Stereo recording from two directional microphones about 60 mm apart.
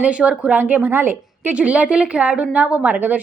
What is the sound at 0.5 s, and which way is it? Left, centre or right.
A woman's voice, right.